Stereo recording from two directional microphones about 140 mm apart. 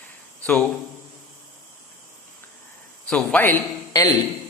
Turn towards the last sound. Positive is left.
turn(degrees=25)  # may be behind; listen again after turning